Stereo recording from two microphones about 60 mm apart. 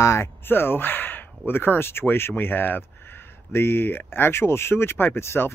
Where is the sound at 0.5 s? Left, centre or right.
Left.